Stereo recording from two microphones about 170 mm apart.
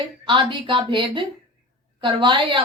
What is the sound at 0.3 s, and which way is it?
A woman's voice, 30° right (ahead or behind).